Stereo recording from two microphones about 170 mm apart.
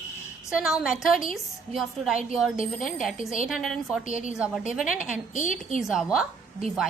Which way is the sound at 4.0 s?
50° left (ahead or behind).